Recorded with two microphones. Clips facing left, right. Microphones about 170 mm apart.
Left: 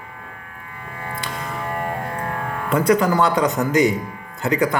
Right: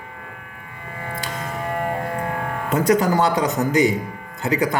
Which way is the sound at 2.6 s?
40° right (ahead or behind).